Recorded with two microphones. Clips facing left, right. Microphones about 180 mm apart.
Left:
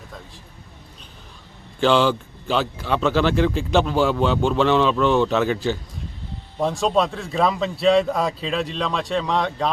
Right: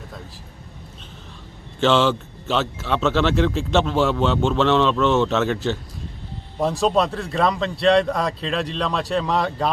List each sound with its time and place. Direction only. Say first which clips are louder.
1.8 s speech: even; centre (ahead or behind)